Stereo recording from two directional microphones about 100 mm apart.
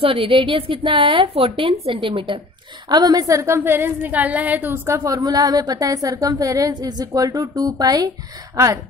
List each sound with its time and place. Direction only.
0.0 s a woman's voice: 65° right (ahead or behind)
2.9 s a woman's voice: 45° right (ahead or behind)